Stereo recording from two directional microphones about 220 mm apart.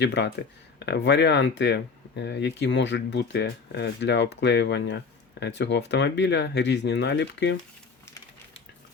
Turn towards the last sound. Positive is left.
turn(degrees=55)  # may be behind; listen again after turning